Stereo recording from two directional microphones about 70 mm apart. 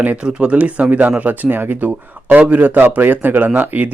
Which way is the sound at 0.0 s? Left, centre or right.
Right.